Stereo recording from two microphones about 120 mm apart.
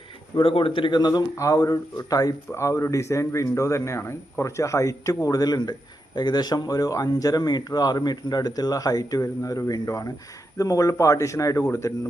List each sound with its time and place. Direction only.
0.3 s a man's voice: 50° left (ahead or behind); by 11.9 s 25° left (ahead or behind)